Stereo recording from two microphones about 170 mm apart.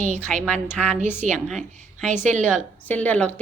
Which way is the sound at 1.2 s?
45° right (ahead or behind).